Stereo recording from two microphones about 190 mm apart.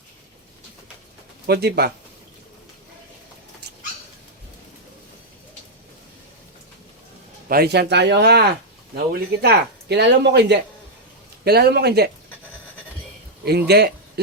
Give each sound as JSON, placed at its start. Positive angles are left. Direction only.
{"t": 1.5, "sound": "speech", "side_deg": -60}
{"t": 7.4, "sound": "speech", "side_deg": -55}
{"t": 13.4, "sound": "speech", "side_deg": -60}